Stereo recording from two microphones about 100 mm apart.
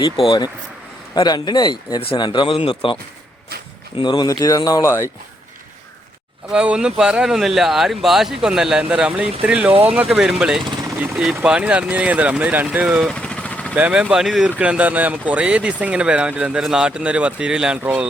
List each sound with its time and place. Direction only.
0.3 s speech: 45° left (ahead or behind); by 3.0 s 65° left (ahead or behind)
3.9 s speech: 50° left (ahead or behind)
4.3 s speech: 35° left (ahead or behind)
6.5 s speech: 10° right (ahead or behind)
10.1 s speech: 5° right (ahead or behind)
13.1 s vehicle: 10° left (ahead or behind)
13.7 s speech: 15° right (ahead or behind)
14.6 s speech: 15° right (ahead or behind)